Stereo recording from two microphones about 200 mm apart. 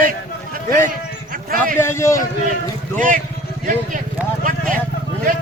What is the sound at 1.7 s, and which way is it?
Speech, 15° left (ahead or behind).